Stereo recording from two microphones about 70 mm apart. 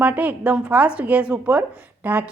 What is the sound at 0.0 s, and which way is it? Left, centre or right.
A woman's voice, right.